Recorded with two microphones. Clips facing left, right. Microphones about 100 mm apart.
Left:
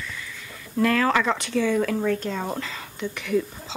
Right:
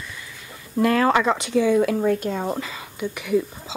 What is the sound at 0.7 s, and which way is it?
Speech, 20° right (ahead or behind).